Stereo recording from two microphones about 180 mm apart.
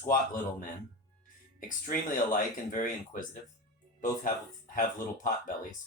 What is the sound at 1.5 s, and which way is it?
Speech, 50° left (ahead or behind).